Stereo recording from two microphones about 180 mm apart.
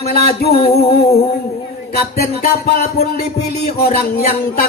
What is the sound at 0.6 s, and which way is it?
Speech, 35° left (ahead or behind).